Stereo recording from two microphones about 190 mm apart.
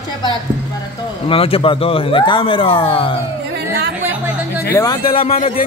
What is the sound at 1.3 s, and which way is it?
Speech, 30° left (ahead or behind).